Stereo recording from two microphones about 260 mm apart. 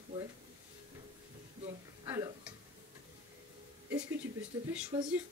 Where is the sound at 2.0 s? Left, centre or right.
Centre.